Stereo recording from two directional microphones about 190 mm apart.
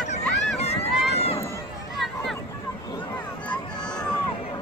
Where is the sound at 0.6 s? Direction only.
35° left (ahead or behind).